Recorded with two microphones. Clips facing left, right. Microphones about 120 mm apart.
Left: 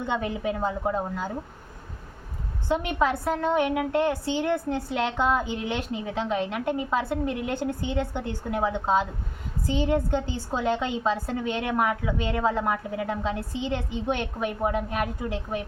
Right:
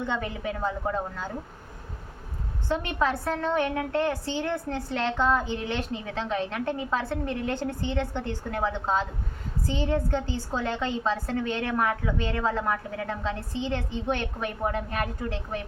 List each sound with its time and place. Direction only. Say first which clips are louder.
0.0 s a woman's voice: left 3 dB; 20° left (ahead or behind)
2.6 s a woman's voice: left 2 dB; 15° left (ahead or behind)